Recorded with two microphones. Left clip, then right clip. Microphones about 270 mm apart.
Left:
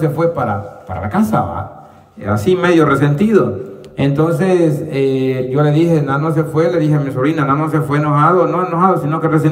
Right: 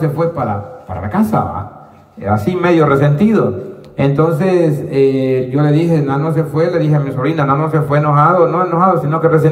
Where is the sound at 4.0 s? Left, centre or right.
Centre.